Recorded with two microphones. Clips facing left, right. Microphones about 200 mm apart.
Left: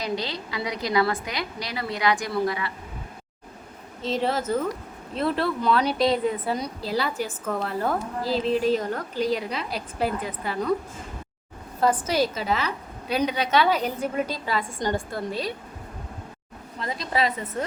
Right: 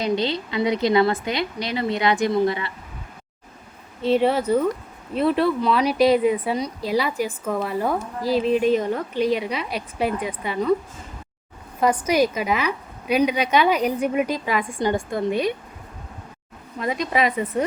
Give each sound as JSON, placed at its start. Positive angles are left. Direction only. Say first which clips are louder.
{"t": 0.0, "sound": "a woman's voice", "louder": "right 6 dB", "side_deg": -25}
{"t": 4.0, "sound": "a woman's voice", "louder": "right 6 dB", "side_deg": -10}
{"t": 11.8, "sound": "a woman's voice", "louder": "right 3 dB", "side_deg": -15}
{"t": 16.8, "sound": "a woman's voice", "louder": "right 4 dB", "side_deg": -15}